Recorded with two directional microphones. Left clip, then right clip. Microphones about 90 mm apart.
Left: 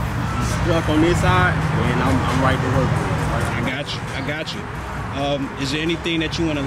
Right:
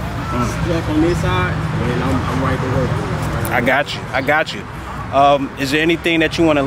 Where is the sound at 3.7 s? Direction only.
40° right (ahead or behind).